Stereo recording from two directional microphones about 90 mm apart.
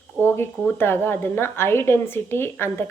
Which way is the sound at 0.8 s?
25° left (ahead or behind).